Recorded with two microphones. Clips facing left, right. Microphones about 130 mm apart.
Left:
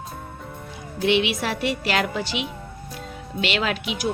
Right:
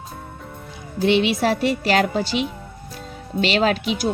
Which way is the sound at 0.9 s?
35° right (ahead or behind).